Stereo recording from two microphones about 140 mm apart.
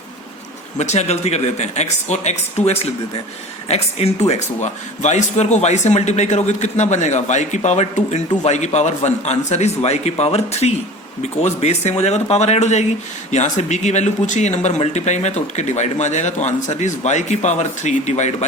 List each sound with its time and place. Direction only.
0.8 s a man's voice: 50° left (ahead or behind)